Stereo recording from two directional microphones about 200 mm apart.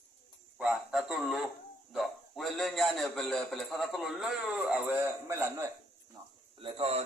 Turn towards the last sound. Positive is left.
turn(degrees=-30)  # may be behind; listen again after turning